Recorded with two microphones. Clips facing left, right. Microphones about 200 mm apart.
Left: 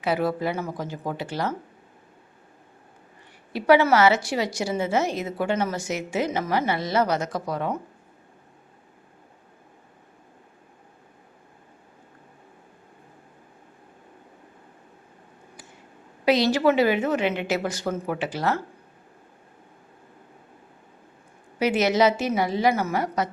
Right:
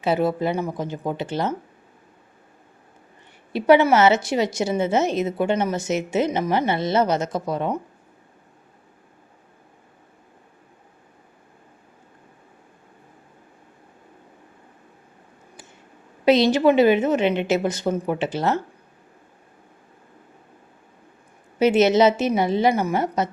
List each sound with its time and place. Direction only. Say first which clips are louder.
0.0 s a woman's voice: right 3 dB; 25° right (ahead or behind)
3.5 s a woman's voice: right 3 dB; 20° right (ahead or behind)
16.2 s a woman's voice: right 4 dB; 20° right (ahead or behind)
21.6 s a woman's voice: right 4 dB; 25° right (ahead or behind)